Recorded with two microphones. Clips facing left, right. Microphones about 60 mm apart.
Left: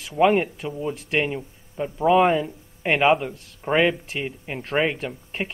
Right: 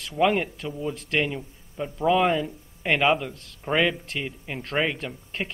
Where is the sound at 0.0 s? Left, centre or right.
Centre.